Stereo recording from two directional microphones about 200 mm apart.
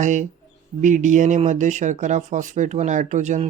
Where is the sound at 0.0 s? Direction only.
35° right (ahead or behind).